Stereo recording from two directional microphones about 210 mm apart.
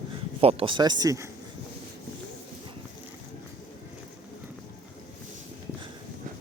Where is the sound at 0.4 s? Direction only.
25° right (ahead or behind).